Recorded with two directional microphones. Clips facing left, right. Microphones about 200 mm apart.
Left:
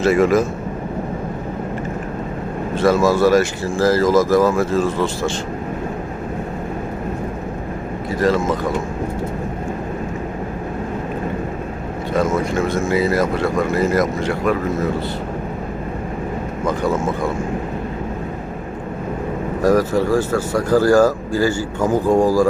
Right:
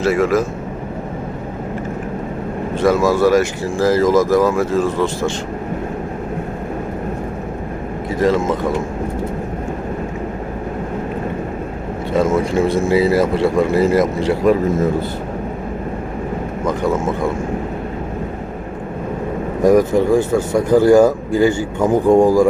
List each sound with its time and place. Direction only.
0.0 s a man's voice: 5° right (ahead or behind)
2.7 s speech: 15° right (ahead or behind)
12.1 s speech: 30° right (ahead or behind)
19.6 s speech: 20° right (ahead or behind)